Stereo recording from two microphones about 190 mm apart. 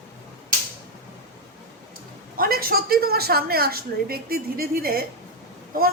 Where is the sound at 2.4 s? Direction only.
50° right (ahead or behind).